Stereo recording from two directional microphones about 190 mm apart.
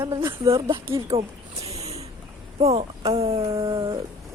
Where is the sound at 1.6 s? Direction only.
35° right (ahead or behind).